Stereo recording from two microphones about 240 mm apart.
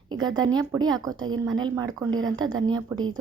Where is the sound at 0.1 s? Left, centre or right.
Centre.